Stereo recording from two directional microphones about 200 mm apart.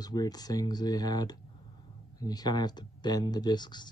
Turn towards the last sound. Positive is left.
turn(degrees=20)  # may be behind; listen again after turning